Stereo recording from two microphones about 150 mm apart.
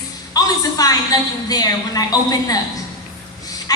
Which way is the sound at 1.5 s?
25° left (ahead or behind).